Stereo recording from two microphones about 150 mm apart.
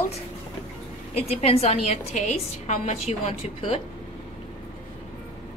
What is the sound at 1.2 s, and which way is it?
A woman's voice, 45° left (ahead or behind).